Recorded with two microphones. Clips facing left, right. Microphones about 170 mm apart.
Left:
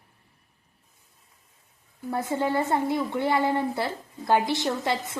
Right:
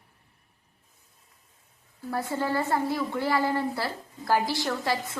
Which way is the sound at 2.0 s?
20° left (ahead or behind).